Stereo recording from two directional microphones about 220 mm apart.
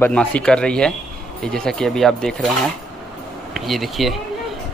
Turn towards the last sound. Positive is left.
turn(degrees=0)  # may be behind; listen again after turning